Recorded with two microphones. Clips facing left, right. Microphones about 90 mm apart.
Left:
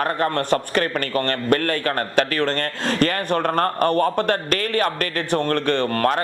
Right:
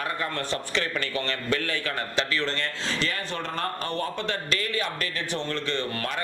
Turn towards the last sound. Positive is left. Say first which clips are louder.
# left 10 dB
turn(degrees=50)  # may be behind; listen again after turning